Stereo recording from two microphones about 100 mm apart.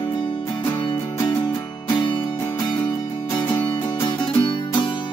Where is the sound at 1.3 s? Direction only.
45° left (ahead or behind).